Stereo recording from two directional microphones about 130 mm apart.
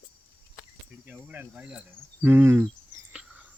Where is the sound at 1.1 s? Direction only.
10° right (ahead or behind).